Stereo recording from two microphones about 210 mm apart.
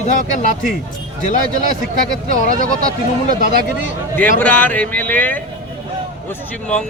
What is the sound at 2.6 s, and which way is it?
Speech, 40° right (ahead or behind).